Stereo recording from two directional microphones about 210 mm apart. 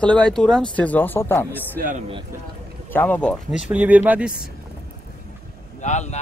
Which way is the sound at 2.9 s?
10° left (ahead or behind).